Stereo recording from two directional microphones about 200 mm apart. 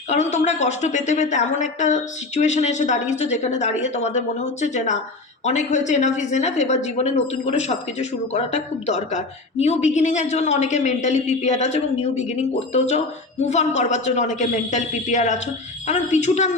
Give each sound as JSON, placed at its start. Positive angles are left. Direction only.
{"t": 0.1, "sound": "speech", "side_deg": 35}